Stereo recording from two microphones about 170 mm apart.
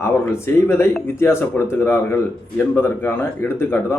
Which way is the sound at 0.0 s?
15° left (ahead or behind).